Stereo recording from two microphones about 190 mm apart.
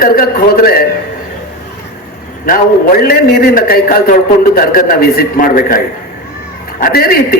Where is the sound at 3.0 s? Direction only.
50° left (ahead or behind).